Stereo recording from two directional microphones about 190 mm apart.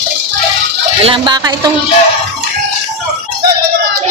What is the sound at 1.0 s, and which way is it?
Speech, 25° right (ahead or behind).